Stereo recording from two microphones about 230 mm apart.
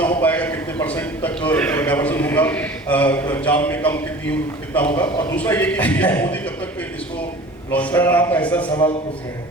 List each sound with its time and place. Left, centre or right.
0.2 s a man's voice: centre
7.7 s a man's voice: centre
8.6 s a man's voice: left